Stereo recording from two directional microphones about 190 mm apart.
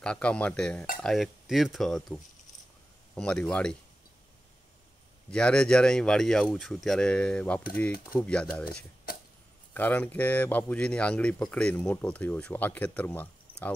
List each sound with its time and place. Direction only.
0.0 s speech: 5° left (ahead or behind)
5.3 s speech: 5° left (ahead or behind)
9.1 s a sound: 50° left (ahead or behind)
9.8 s speech: 10° left (ahead or behind)